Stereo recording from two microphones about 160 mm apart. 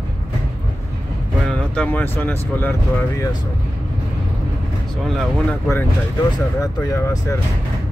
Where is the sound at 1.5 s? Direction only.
10° left (ahead or behind).